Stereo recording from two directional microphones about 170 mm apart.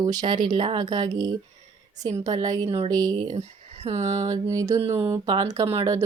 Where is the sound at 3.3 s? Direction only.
40° right (ahead or behind).